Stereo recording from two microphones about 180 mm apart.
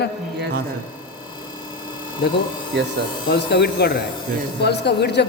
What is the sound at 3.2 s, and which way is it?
A man's voice, 65° left (ahead or behind).